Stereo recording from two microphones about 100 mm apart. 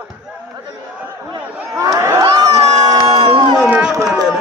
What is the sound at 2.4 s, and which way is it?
Crowd, 45° right (ahead or behind).